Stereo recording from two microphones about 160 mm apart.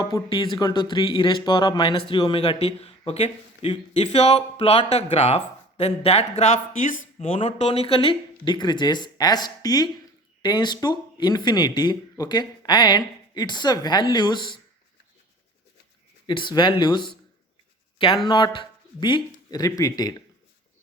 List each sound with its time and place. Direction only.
0.0 s speech: 30° left (ahead or behind)
16.2 s speech: 30° left (ahead or behind)
17.9 s a sound: 35° left (ahead or behind)
18.3 s speech: 30° left (ahead or behind)